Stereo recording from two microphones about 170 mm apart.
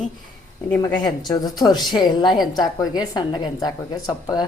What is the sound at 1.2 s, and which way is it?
A woman's voice, 25° left (ahead or behind).